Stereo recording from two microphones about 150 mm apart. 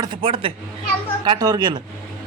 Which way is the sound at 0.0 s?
35° right (ahead or behind).